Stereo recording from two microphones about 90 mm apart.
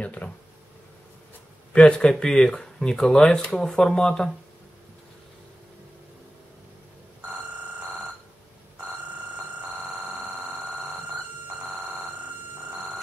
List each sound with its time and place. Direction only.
0.0 s speech: 15° left (ahead or behind)
1.7 s speech: 10° left (ahead or behind)
9.6 s telephone bell ringing: 10° right (ahead or behind)